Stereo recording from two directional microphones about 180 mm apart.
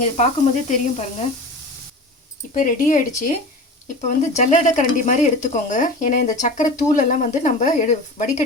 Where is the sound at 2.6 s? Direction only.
50° left (ahead or behind).